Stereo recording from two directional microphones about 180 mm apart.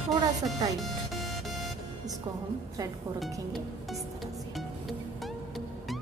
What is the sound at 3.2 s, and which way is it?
Speech, centre (ahead or behind).